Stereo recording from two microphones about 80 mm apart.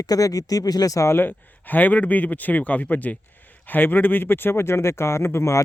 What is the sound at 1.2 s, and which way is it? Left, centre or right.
Speech, left.